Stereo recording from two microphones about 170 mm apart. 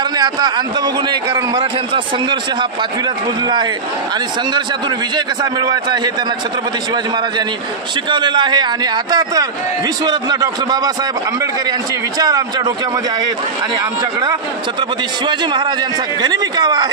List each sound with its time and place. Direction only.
0.2 s a man's voice: 25° right (ahead or behind)
4.6 s a man's voice: 25° right (ahead or behind)
8.1 s a man's voice: 25° right (ahead or behind)
12.2 s a man's voice: 25° right (ahead or behind)
14.8 s a man's voice: 25° right (ahead or behind)